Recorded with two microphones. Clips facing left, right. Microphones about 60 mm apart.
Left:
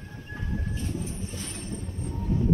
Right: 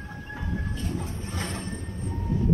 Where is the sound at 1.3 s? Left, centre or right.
Right.